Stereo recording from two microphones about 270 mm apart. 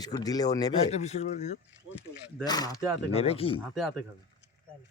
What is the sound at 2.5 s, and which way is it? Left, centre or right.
Speech, centre.